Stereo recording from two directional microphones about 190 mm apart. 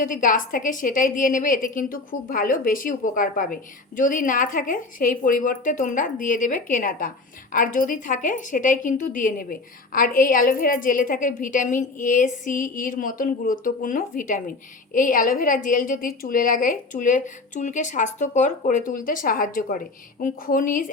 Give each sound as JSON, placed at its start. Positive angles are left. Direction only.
{"t": 0.0, "sound": "a woman's voice", "side_deg": 45}